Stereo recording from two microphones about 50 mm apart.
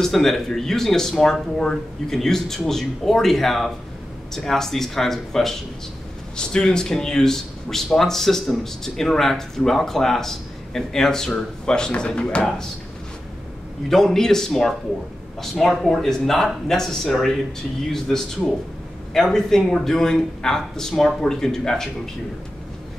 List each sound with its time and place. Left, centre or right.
0.0 s speech: centre
13.8 s speech: centre